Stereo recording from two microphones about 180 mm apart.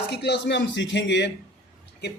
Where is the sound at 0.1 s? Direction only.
70° left (ahead or behind).